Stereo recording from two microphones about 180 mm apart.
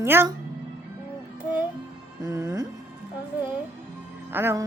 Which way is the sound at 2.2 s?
15° right (ahead or behind).